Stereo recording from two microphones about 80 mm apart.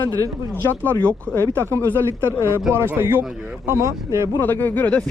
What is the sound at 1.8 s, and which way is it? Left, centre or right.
Speech, left.